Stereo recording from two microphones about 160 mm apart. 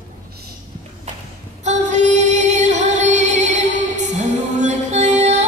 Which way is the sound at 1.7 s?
50° right (ahead or behind).